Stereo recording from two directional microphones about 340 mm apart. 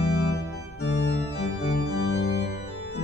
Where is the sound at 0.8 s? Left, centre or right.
Left.